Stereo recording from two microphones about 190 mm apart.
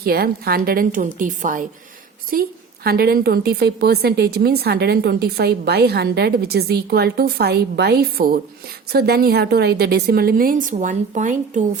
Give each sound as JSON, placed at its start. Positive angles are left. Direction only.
{"t": 0.0, "sound": "a woman's voice", "side_deg": -55}